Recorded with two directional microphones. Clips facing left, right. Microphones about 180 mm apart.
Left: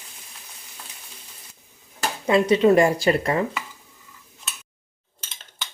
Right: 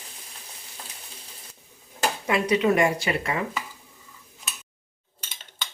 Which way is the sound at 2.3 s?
30° left (ahead or behind).